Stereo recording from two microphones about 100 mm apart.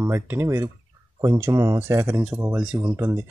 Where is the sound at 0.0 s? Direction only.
25° right (ahead or behind).